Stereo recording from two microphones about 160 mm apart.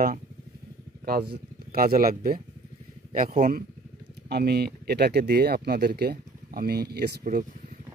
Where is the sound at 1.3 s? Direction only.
70° right (ahead or behind).